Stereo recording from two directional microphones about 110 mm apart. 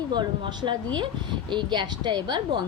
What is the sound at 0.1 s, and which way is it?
Speech, 45° right (ahead or behind).